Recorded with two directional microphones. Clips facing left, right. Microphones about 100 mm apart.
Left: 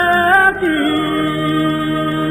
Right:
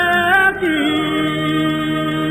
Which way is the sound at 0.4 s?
20° left (ahead or behind).